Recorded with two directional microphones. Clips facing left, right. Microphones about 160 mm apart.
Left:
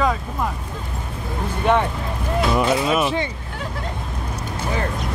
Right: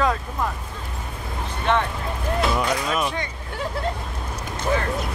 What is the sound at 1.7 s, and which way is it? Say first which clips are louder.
Speech: left 3 dB; 10° left (ahead or behind).